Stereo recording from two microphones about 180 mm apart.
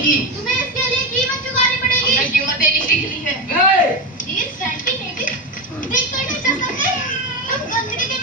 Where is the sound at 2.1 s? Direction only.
50° left (ahead or behind).